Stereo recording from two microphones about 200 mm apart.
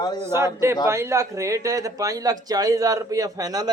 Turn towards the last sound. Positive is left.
turn(degrees=-20)  # may be behind; listen again after turning